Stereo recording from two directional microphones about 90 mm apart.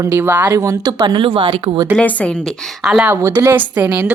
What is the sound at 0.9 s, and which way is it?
Speech, 50° right (ahead or behind).